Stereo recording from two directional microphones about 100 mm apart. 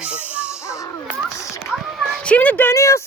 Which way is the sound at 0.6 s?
30° left (ahead or behind).